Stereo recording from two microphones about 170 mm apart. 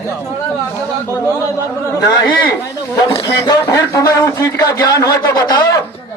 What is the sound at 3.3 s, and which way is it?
A man's voice, 20° left (ahead or behind).